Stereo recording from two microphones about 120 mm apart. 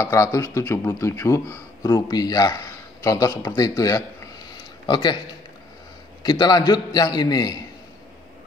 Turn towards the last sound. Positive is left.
turn(degrees=35)  # may be behind; listen again after turning